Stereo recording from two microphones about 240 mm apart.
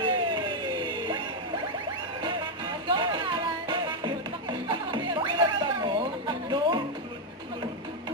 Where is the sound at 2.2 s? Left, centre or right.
Centre.